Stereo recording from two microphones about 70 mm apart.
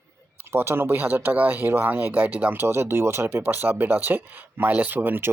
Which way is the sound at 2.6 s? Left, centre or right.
Right.